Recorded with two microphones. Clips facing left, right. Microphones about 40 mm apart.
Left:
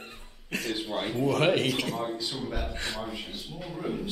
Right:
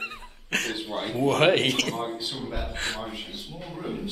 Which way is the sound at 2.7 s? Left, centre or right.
Right.